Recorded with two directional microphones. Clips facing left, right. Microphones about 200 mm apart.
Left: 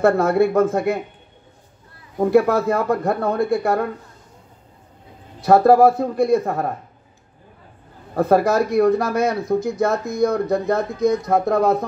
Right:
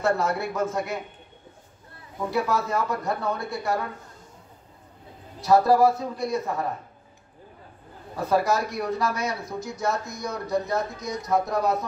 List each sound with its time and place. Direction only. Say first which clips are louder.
0.0 s speech: left 9 dB; 55° left (ahead or behind)
2.1 s speech: left 10 dB; 55° left (ahead or behind)
5.4 s speech: left 6 dB; 55° left (ahead or behind)
8.2 s speech: left 7 dB; 55° left (ahead or behind)